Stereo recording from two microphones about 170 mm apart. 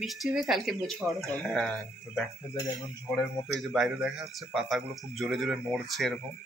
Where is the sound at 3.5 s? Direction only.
Centre (ahead or behind).